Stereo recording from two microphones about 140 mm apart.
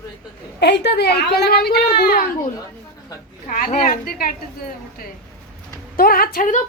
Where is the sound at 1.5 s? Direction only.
90° left.